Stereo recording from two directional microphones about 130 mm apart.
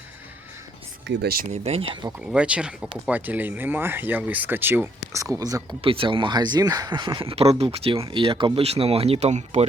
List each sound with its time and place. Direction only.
1.6 s speech: 45° right (ahead or behind)
2.2 s speech: 10° right (ahead or behind); by 5.6 s 25° right (ahead or behind)
5.8 s speech: 45° right (ahead or behind); by 9.6 s 60° right (ahead or behind)